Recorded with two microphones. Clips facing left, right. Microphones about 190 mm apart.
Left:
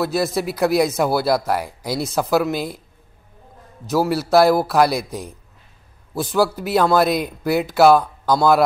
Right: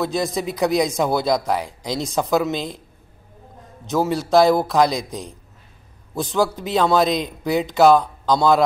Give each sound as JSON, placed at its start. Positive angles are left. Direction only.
{"t": 0.0, "sound": "speech", "side_deg": 5}
{"t": 3.9, "sound": "speech", "side_deg": 5}
{"t": 6.3, "sound": "speech", "side_deg": 5}